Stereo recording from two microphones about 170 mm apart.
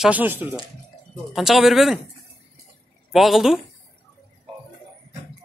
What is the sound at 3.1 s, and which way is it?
Speech, centre (ahead or behind).